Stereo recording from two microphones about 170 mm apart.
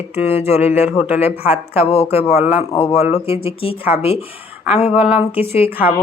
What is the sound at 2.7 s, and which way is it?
Speech, 35° left (ahead or behind).